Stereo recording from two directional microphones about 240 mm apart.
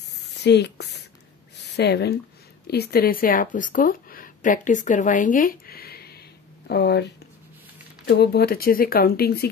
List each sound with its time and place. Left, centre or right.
0.3 s speech: left